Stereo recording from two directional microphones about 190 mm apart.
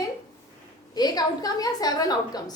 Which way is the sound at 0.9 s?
20° left (ahead or behind).